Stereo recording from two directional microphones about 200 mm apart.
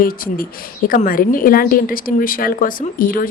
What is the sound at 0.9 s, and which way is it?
A woman's voice, 45° left (ahead or behind).